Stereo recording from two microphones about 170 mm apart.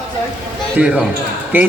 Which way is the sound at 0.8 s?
5° right (ahead or behind).